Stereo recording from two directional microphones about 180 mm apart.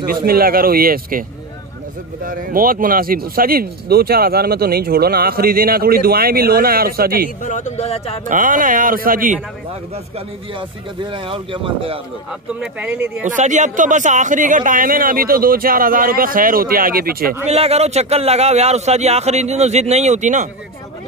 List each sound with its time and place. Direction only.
0.0 s speech: 55° right (ahead or behind)
2.2 s speech: 50° right (ahead or behind)
7.4 s speech: 40° left (ahead or behind)
8.3 s speech: 50° right (ahead or behind)
11.1 s speech: 30° right (ahead or behind)
12.5 s speech: 10° right (ahead or behind)
13.4 s speech: 45° right (ahead or behind)
17.5 s speech: 35° right (ahead or behind)